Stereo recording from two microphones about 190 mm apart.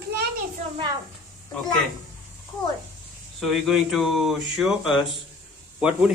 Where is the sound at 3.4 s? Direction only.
Centre (ahead or behind).